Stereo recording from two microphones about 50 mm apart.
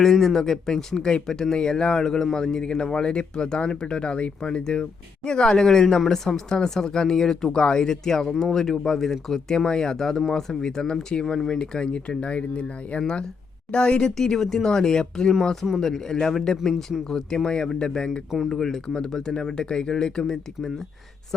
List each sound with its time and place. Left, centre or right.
0.0 s speech: centre
14.2 s speech: centre